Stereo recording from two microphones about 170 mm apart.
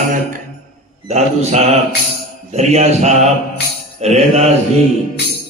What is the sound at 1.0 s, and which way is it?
Mantra, 40° right (ahead or behind).